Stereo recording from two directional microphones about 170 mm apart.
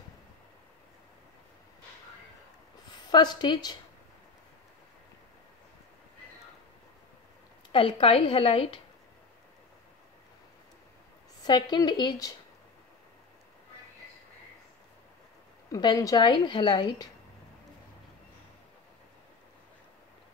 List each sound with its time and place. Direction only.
2.9 s a woman's voice: 25° left (ahead or behind)
7.7 s a woman's voice: 30° left (ahead or behind)
11.4 s a woman's voice: 25° left (ahead or behind)
15.7 s a woman's voice: 20° left (ahead or behind)